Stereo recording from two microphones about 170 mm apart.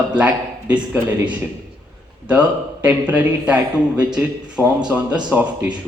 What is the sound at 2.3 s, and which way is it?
Speech, 10° right (ahead or behind).